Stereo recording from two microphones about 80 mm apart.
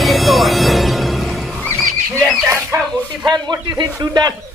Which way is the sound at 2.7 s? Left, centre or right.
Right.